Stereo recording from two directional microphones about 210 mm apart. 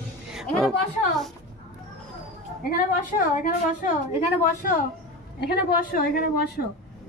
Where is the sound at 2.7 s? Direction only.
40° left (ahead or behind).